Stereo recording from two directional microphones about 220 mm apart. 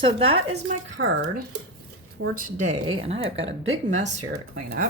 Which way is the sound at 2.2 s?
65° right (ahead or behind).